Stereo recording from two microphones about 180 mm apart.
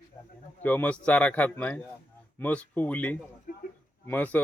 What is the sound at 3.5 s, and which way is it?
Speech, 50° left (ahead or behind).